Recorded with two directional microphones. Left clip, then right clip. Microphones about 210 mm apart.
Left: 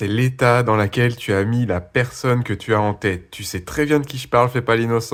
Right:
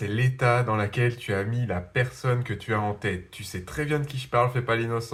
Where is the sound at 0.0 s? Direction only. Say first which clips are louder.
Left 8 dB; 45° left (ahead or behind).